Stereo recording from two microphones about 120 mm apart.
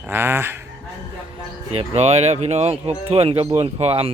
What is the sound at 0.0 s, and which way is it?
Speech, 20° right (ahead or behind).